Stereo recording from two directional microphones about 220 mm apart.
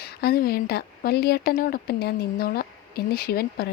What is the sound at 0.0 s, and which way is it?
Speech, 45° left (ahead or behind).